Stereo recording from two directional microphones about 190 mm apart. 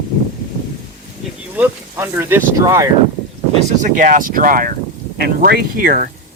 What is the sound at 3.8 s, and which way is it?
Speech, 45° right (ahead or behind).